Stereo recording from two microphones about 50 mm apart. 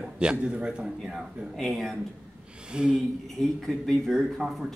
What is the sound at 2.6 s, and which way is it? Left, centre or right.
Speech, centre.